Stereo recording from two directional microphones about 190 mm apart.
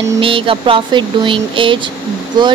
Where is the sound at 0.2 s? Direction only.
30° right (ahead or behind).